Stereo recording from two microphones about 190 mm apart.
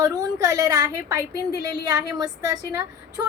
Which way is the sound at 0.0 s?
20° right (ahead or behind).